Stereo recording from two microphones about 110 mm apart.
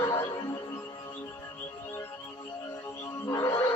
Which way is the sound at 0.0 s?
20° left (ahead or behind).